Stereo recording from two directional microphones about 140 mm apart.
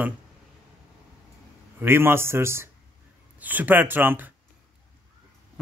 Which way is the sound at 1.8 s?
15° right (ahead or behind).